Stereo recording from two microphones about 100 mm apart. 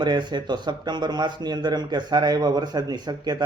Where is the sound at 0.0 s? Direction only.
50° right (ahead or behind).